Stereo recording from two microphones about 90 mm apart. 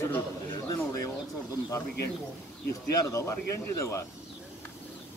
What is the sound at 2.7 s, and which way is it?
A man's voice, 35° left (ahead or behind).